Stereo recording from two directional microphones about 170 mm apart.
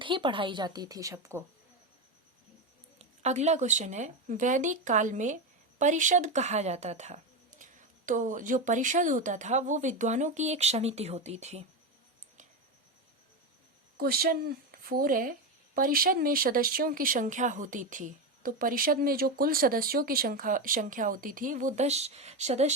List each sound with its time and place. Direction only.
0.0 s a woman's voice: 30° right (ahead or behind)
3.0 s speech: 40° right (ahead or behind)
13.9 s speech: 65° right (ahead or behind); by 22.7 s 40° right (ahead or behind)